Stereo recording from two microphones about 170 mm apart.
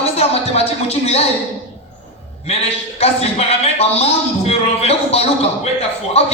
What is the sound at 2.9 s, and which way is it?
A man's voice, 35° left (ahead or behind).